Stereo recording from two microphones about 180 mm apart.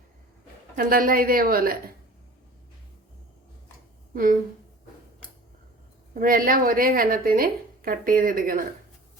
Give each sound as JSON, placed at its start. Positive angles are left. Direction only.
{"t": 0.8, "sound": "a woman's voice", "side_deg": -50}
{"t": 4.1, "sound": "speech", "side_deg": -50}
{"t": 6.1, "sound": "a woman's voice", "side_deg": -55}